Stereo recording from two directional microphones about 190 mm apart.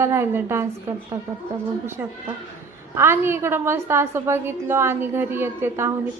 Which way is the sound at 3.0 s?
15° right (ahead or behind).